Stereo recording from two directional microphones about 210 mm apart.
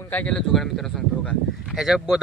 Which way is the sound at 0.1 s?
5° left (ahead or behind).